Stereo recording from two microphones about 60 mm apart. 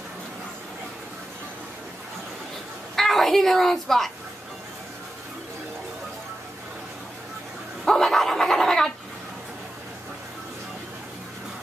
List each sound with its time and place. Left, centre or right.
3.0 s a woman's voice: centre
7.8 s dog: centre